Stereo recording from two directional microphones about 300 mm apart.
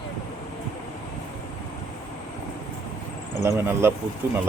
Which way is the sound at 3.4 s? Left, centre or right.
Centre.